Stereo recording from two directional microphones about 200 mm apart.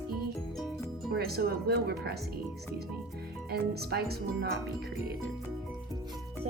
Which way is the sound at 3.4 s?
50° right (ahead or behind).